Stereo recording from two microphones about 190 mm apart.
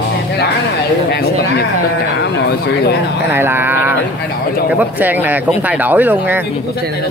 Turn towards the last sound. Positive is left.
turn(degrees=-10)  # may be behind; listen again after turning